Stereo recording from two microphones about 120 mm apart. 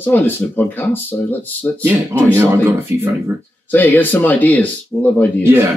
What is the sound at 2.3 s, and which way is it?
Speech, 20° right (ahead or behind).